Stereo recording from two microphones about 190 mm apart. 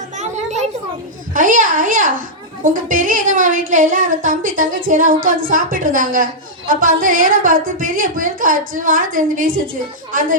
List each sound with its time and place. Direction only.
1.3 s a woman's voice: 45° right (ahead or behind)